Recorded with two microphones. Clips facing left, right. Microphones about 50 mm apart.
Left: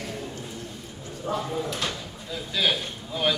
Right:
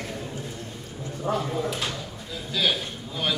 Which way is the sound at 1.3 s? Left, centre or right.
Right.